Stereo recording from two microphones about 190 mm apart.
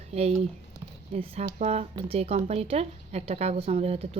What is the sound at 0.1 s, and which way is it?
A woman's voice, 35° right (ahead or behind).